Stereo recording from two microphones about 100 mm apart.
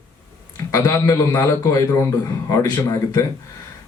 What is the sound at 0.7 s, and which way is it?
A man's voice, 35° left (ahead or behind).